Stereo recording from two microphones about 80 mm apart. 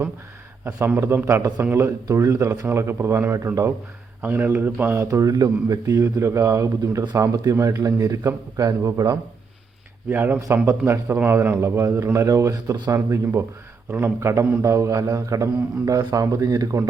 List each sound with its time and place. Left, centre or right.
0.9 s a man's voice: right
1.4 s a man's voice: right
1.7 s a man's voice: right
4.2 s speech: right
5.2 s a man's voice: right
6.0 s a man's voice: right
7.8 s a man's voice: right
10.1 s a man's voice: right
14.6 s a man's voice: right